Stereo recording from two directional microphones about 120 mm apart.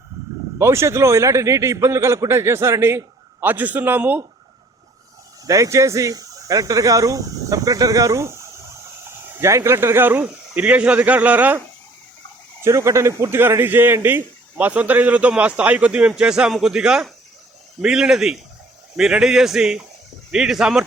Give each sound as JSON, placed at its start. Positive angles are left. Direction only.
{"t": 0.6, "sound": "a man's voice", "side_deg": -20}
{"t": 5.5, "sound": "speech", "side_deg": -25}
{"t": 12.6, "sound": "a man's voice", "side_deg": -25}